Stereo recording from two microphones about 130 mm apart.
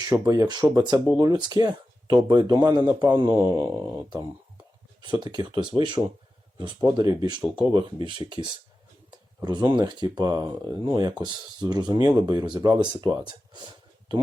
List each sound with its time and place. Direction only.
0.0 s a man's voice: 30° right (ahead or behind)
5.2 s speech: 35° right (ahead or behind)
9.0 s a sound: 30° right (ahead or behind)
9.7 s speech: 35° right (ahead or behind)